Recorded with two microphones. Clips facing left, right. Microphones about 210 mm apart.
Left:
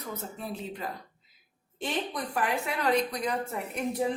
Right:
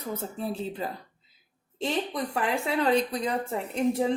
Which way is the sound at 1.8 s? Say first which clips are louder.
Right 4 dB; 25° right (ahead or behind).